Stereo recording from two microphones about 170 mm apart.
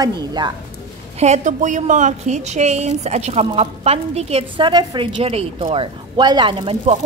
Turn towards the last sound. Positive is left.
turn(degrees=-35)  # may be behind; listen again after turning